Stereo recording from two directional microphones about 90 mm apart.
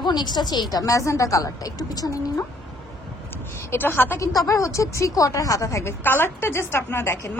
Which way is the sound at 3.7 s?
25° left (ahead or behind).